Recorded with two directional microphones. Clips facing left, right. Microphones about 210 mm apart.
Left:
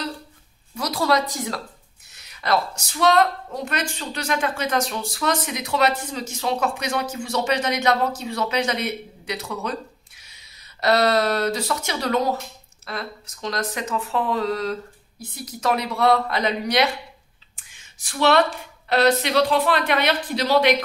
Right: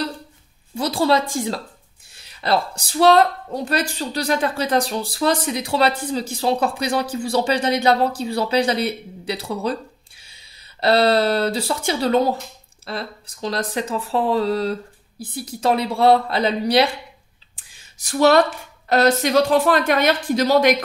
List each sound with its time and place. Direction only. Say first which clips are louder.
0.7 s a woman's voice: right 3 dB; 30° right (ahead or behind)
17.6 s a sound: right 1 dB; 35° right (ahead or behind)
18.9 s a woman's voice: right 2 dB; 45° right (ahead or behind)